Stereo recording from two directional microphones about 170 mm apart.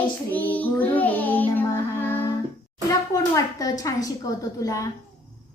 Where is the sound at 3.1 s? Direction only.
20° left (ahead or behind).